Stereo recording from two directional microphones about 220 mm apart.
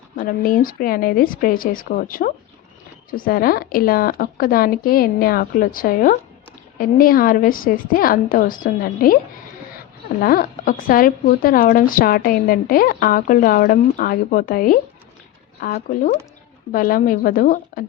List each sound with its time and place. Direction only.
0.2 s a woman's voice: 40° left (ahead or behind)
10.2 s a woman's voice: 40° left (ahead or behind)